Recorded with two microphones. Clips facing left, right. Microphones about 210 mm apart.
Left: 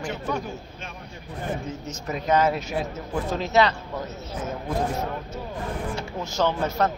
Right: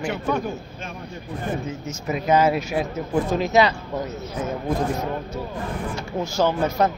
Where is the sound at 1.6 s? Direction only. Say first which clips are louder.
Right 3 dB; 10° right (ahead or behind).